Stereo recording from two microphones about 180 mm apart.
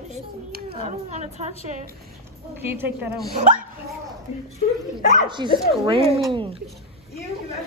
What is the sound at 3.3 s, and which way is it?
Speech, 40° right (ahead or behind).